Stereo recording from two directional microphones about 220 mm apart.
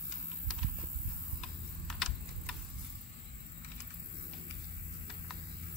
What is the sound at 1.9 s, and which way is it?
Typing, centre (ahead or behind).